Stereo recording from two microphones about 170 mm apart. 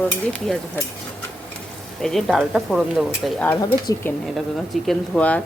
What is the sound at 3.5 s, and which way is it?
Speech, 20° left (ahead or behind).